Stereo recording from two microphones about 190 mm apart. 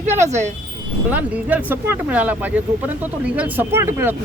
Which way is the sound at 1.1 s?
10° right (ahead or behind).